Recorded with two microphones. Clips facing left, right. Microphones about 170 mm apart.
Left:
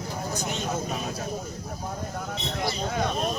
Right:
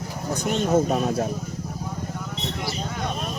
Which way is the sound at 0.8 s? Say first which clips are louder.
Right 9 dB; 55° right (ahead or behind).